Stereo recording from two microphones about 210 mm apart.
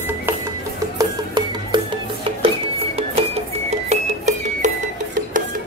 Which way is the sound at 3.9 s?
35° right (ahead or behind).